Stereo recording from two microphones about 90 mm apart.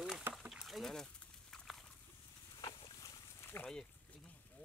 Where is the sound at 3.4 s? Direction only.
25° left (ahead or behind).